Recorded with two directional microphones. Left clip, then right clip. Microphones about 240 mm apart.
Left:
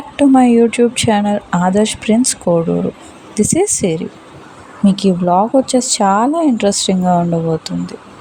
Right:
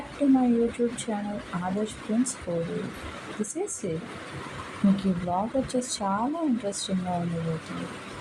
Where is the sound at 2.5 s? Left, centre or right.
Left.